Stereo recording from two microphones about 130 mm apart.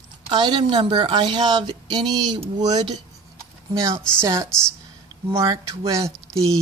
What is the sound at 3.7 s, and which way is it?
Speech, 25° right (ahead or behind).